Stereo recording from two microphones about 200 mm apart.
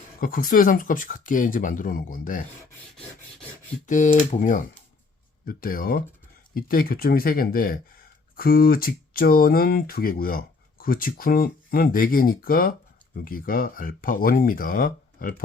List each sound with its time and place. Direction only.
0.2 s speech: 45° left (ahead or behind)
3.8 s speech: 40° left (ahead or behind)